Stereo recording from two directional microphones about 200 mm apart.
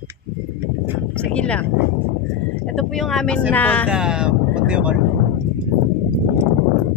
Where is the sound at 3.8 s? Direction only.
5° right (ahead or behind).